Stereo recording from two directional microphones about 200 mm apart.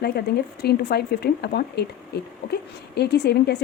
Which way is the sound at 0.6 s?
55° left (ahead or behind).